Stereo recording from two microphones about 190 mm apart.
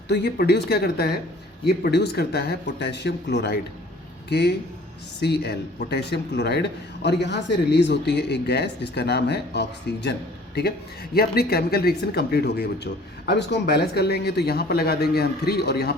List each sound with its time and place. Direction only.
0.1 s a man's voice: 55° left (ahead or behind)